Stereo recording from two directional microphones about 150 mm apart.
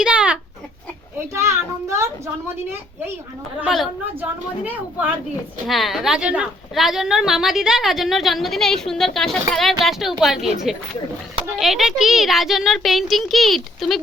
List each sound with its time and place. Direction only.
0.0 s a sound: 5° right (ahead or behind)
1.1 s a child's voice: 20° right (ahead or behind)
3.6 s a woman's voice: centre (ahead or behind)
4.2 s a woman's voice: 10° right (ahead or behind)
5.6 s a woman's voice: centre (ahead or behind)